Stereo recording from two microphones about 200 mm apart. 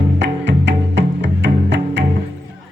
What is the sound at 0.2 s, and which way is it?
Music, 60° right (ahead or behind).